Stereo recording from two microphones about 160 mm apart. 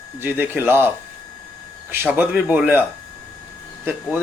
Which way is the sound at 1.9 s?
10° right (ahead or behind).